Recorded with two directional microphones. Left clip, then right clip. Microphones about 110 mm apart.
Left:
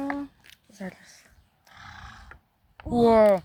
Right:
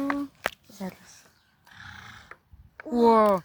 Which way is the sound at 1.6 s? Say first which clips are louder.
Even; 10° right (ahead or behind).